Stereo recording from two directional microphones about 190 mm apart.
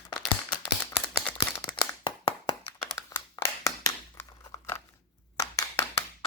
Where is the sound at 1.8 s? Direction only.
25° left (ahead or behind).